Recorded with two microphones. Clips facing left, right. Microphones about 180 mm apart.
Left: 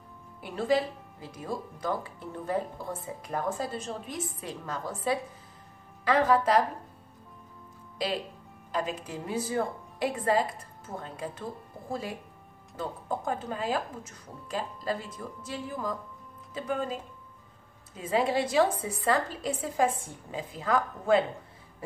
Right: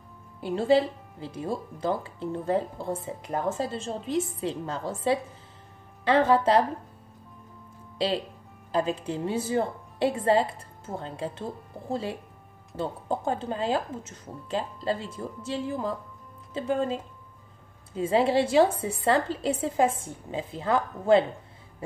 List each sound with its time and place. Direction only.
0.4 s speech: 30° right (ahead or behind)
8.7 s speech: 30° right (ahead or behind)